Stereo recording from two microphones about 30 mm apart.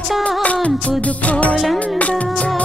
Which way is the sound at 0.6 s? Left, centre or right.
Left.